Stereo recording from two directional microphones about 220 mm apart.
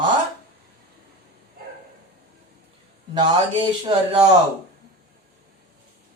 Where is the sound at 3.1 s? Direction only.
20° right (ahead or behind).